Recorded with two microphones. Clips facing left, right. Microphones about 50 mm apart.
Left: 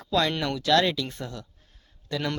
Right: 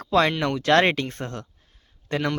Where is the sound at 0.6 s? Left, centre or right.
Right.